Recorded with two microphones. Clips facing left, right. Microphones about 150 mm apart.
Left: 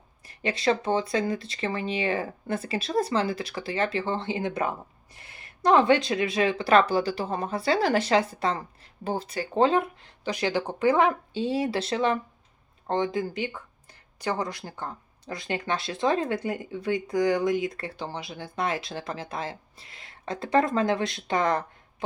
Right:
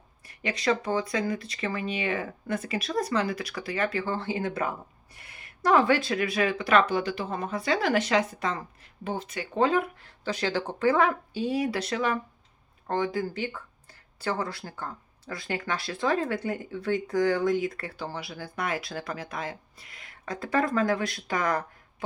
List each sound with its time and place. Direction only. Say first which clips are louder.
0.4 s speech: left 2 dB; 30° left (ahead or behind)